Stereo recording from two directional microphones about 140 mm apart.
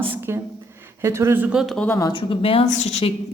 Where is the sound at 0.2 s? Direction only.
15° right (ahead or behind).